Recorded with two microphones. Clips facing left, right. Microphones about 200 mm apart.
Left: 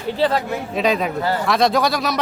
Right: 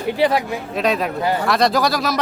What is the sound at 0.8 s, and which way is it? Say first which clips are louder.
Speech: even; centre (ahead or behind).